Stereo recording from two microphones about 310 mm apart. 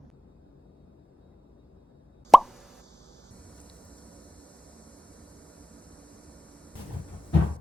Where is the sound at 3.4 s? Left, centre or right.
Centre.